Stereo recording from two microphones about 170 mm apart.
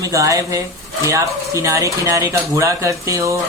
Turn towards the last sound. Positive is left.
turn(degrees=-20)  # may be behind; listen again after turning